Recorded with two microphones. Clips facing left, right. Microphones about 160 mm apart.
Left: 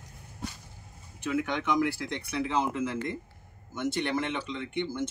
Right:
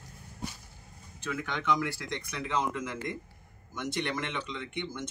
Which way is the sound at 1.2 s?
15° left (ahead or behind).